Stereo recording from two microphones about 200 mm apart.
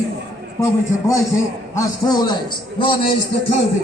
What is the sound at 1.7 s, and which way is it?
A man's voice, 20° left (ahead or behind).